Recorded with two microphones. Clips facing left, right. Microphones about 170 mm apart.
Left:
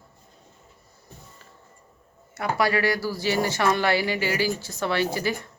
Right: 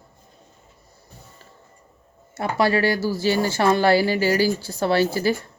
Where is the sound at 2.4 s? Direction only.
25° right (ahead or behind).